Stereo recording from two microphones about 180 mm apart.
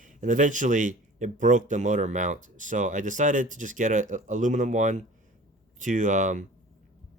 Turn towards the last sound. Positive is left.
turn(degrees=-45)  # may be behind; listen again after turning